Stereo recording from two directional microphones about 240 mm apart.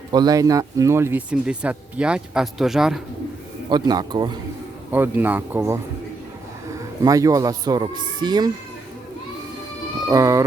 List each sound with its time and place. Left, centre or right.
0.1 s speech: centre
3.7 s speech: centre
7.0 s speech: centre
10.1 s speech: centre